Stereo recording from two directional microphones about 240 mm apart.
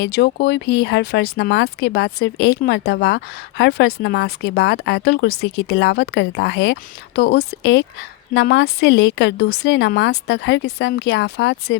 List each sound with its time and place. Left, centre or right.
0.0 s speech: left